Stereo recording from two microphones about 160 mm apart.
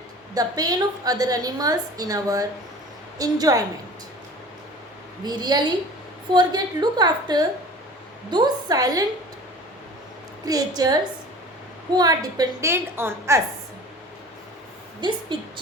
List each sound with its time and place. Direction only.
0.3 s a woman's voice: 25° right (ahead or behind)
5.2 s a woman's voice: 25° right (ahead or behind)
10.4 s a woman's voice: 25° right (ahead or behind)
11.9 s a woman's voice: 25° right (ahead or behind)
15.0 s a woman's voice: 30° right (ahead or behind)